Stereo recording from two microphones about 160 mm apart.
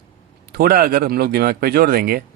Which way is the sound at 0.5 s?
70° right (ahead or behind).